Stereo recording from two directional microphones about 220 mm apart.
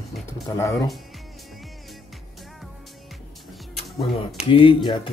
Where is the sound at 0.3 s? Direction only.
15° left (ahead or behind).